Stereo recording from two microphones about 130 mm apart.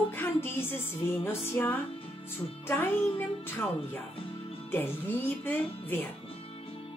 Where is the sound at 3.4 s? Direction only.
15° left (ahead or behind).